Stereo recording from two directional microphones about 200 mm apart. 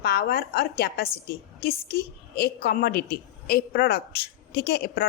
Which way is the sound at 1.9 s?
50° left (ahead or behind).